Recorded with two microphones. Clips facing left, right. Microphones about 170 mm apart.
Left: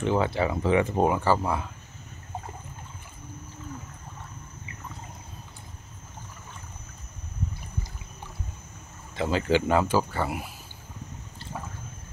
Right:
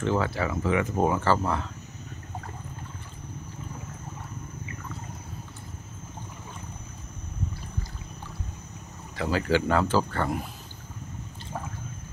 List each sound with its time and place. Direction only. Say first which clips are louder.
0.0 s speech: left 2 dB; 20° left (ahead or behind)
1.0 s speech: left 1 dB; 15° left (ahead or behind)
9.1 s speech: left 1 dB; 20° left (ahead or behind)